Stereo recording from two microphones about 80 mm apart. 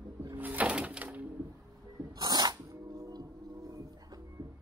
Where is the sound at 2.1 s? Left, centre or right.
Right.